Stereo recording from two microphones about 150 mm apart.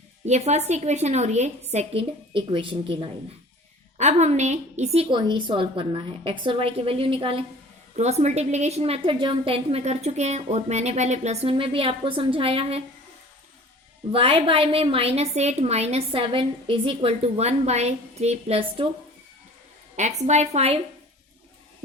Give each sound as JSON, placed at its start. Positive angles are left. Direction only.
{"t": 0.3, "sound": "a woman's voice", "side_deg": -45}
{"t": 3.9, "sound": "a woman's voice", "side_deg": -50}
{"t": 5.1, "sound": "a woman's voice", "side_deg": -35}
{"t": 7.9, "sound": "a woman's voice", "side_deg": -50}
{"t": 14.1, "sound": "a woman's voice", "side_deg": -40}
{"t": 20.0, "sound": "a woman's voice", "side_deg": -50}